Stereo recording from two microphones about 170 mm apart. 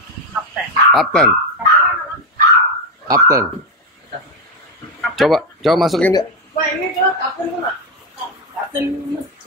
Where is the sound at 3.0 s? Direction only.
20° right (ahead or behind).